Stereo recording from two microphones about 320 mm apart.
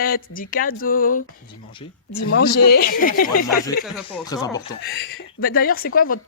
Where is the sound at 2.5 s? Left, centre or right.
Left.